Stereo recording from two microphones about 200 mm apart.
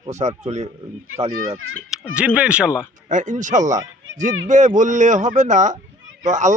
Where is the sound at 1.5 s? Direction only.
90° right.